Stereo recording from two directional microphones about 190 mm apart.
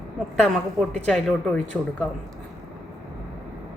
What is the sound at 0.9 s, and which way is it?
A woman's voice, 5° left (ahead or behind).